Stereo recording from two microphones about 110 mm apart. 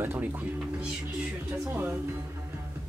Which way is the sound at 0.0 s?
20° right (ahead or behind).